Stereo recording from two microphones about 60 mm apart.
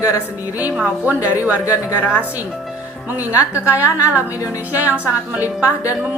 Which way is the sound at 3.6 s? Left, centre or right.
Right.